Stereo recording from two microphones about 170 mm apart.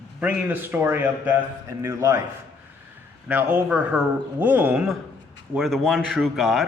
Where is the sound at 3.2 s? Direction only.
10° right (ahead or behind).